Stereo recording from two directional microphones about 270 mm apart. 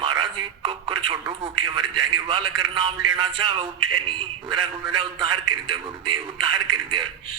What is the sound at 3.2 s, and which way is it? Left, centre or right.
Music, centre.